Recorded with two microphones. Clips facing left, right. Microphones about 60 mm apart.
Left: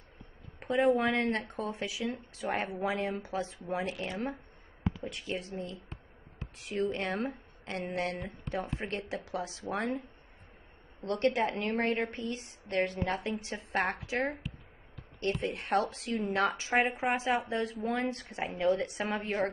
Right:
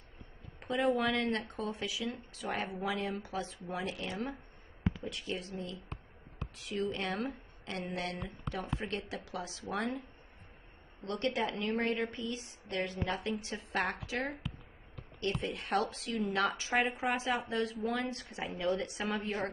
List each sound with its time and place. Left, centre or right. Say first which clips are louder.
0.6 s speech: left 4 dB; left
5.0 s a woman's voice: left 2 dB; left
11.1 s a woman's voice: left 5 dB; left